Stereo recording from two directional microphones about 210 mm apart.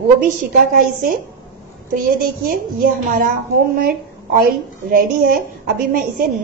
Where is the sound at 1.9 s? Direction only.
45° right (ahead or behind).